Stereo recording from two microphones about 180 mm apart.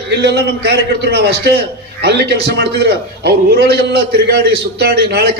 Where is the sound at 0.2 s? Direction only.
70° right (ahead or behind).